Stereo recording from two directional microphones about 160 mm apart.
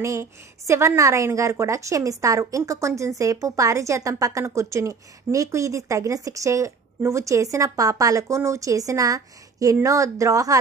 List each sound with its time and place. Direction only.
0.0 s a woman's voice: 20° right (ahead or behind)